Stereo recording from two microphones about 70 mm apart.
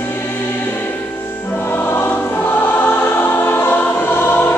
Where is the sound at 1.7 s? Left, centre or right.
Left.